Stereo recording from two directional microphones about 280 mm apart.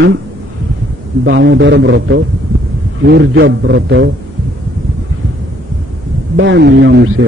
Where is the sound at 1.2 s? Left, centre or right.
Right.